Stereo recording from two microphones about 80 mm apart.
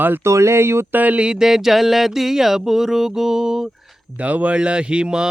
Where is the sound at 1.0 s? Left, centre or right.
Centre.